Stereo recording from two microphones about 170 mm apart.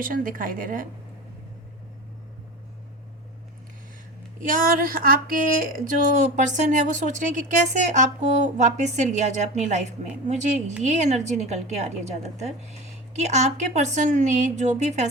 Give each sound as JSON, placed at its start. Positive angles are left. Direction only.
{"t": 0.0, "sound": "a woman's voice", "side_deg": -55}
{"t": 4.4, "sound": "a woman's voice", "side_deg": -55}